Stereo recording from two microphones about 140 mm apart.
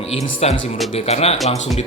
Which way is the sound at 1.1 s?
50° left (ahead or behind).